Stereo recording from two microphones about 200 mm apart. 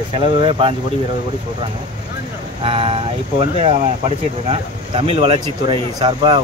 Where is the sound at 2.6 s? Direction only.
30° right (ahead or behind).